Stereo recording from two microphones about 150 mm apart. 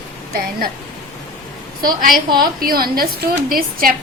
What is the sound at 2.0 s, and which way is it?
A woman's voice, 70° right (ahead or behind).